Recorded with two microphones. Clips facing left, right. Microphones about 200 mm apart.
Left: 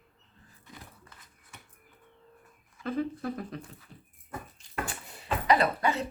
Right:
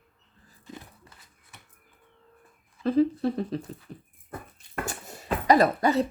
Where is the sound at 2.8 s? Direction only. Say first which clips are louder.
Right 9 dB; 30° right (ahead or behind).